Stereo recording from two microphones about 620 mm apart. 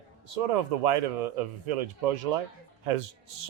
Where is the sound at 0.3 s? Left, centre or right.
Right.